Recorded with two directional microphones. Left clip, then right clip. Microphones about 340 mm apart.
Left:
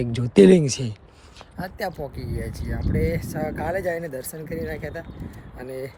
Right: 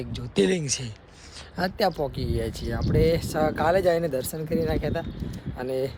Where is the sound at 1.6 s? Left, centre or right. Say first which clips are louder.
Right 5 dB; right.